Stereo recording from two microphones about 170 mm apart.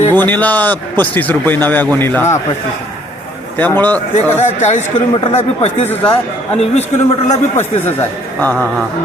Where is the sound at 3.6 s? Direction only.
10° left (ahead or behind).